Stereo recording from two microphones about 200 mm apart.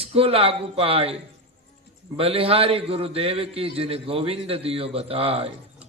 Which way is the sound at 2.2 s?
30° right (ahead or behind).